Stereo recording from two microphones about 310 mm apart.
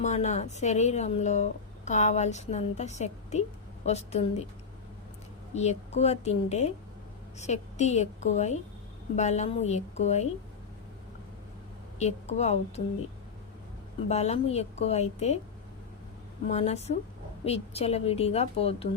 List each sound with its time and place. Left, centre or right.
0.0 s a woman's voice: left
5.5 s a woman's voice: left
11.9 s a woman's voice: left
14.1 s a woman's voice: left
16.5 s a woman's voice: left